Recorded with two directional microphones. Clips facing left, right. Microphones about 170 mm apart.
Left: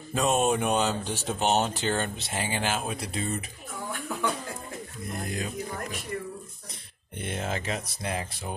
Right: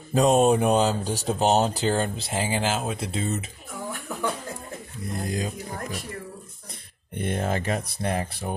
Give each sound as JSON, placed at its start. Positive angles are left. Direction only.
{"t": 0.1, "sound": "speech", "side_deg": -35}
{"t": 5.0, "sound": "speech", "side_deg": -30}
{"t": 7.2, "sound": "speech", "side_deg": -50}